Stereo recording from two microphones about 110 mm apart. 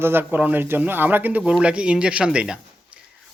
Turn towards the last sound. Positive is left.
turn(degrees=-10)  # may be behind; listen again after turning